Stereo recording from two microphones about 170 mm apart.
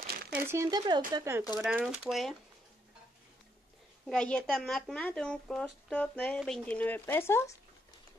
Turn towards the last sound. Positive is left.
turn(degrees=15)  # may be behind; listen again after turning